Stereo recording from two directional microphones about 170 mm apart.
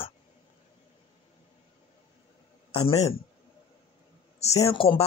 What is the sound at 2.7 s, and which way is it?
Speech, 35° left (ahead or behind).